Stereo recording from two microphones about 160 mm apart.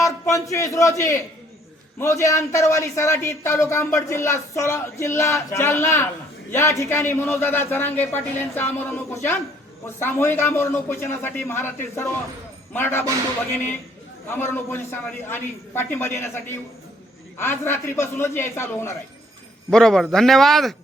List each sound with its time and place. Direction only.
0.0 s a man's voice: 20° left (ahead or behind)
14.3 s speech: 15° left (ahead or behind)
19.7 s a man's voice: 5° left (ahead or behind)